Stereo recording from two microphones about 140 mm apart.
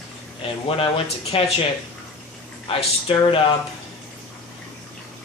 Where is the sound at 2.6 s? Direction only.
40° left (ahead or behind).